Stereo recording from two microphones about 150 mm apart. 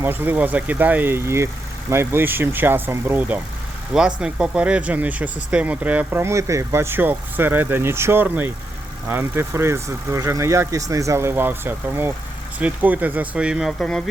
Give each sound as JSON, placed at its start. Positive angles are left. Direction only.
{"t": 0.0, "sound": "speech", "side_deg": -10}
{"t": 13.7, "sound": "speech", "side_deg": 5}